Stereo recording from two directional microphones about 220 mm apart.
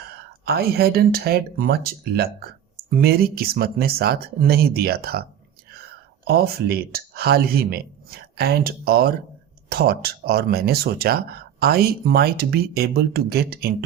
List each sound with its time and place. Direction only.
0.0 s speech: 45° right (ahead or behind)
6.2 s speech: 45° right (ahead or behind)